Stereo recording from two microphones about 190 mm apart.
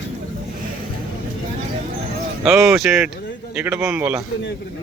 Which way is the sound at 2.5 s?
5° right (ahead or behind).